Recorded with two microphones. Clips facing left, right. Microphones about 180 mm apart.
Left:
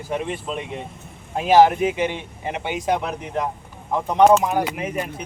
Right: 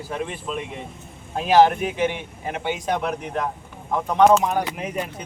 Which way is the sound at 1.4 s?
20° left (ahead or behind).